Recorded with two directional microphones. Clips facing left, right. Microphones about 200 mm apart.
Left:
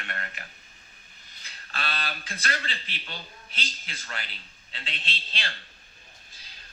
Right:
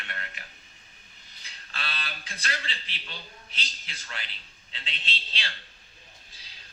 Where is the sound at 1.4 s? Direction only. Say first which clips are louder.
Left 4 dB; 50° left (ahead or behind).